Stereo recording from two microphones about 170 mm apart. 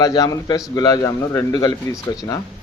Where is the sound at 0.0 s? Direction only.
25° left (ahead or behind).